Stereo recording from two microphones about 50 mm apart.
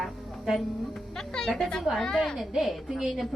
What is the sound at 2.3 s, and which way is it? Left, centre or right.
Speech, centre.